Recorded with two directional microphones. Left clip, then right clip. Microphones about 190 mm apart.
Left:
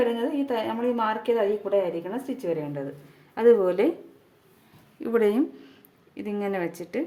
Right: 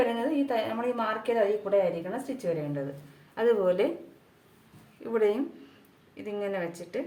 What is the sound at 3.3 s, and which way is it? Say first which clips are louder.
Speech: left 5 dB; 45° left (ahead or behind).